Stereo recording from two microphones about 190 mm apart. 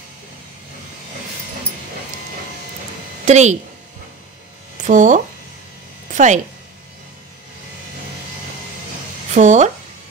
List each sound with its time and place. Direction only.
3.3 s a woman's voice: 35° right (ahead or behind)
4.8 s speech: 40° right (ahead or behind)
9.3 s speech: 40° right (ahead or behind)